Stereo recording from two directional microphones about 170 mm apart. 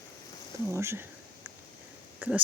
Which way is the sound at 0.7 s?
15° right (ahead or behind).